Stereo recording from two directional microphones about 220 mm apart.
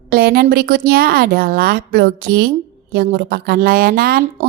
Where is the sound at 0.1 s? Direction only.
45° right (ahead or behind).